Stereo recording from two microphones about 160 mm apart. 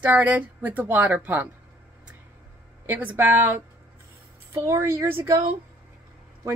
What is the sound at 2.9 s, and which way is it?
Speech, 10° right (ahead or behind).